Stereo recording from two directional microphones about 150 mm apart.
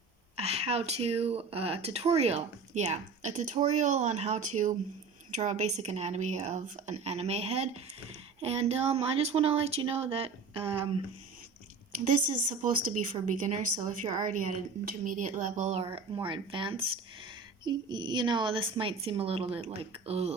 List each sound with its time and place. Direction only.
0.3 s speech: 45° right (ahead or behind)
12.1 s a woman's voice: 60° right (ahead or behind); by 20.3 s 45° right (ahead or behind)